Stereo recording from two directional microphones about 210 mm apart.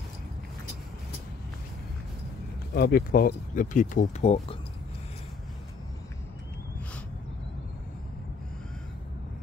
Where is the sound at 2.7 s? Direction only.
45° left (ahead or behind); by 4.6 s 30° left (ahead or behind).